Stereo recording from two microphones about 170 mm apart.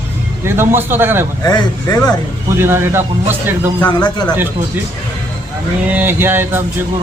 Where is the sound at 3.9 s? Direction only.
25° left (ahead or behind).